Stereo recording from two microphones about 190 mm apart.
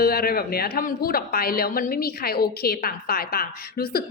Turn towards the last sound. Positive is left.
turn(degrees=55)  # may be behind; listen again after turning